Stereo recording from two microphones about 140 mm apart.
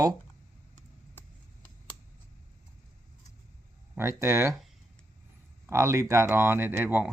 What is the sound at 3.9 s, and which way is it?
Speech, 20° right (ahead or behind).